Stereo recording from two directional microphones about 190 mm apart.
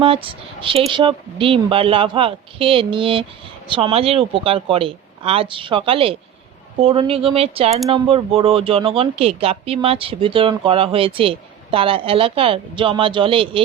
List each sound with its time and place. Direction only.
0.0 s speech: 30° right (ahead or behind)